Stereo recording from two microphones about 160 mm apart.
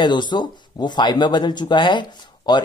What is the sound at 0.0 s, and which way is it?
Speech, 30° left (ahead or behind).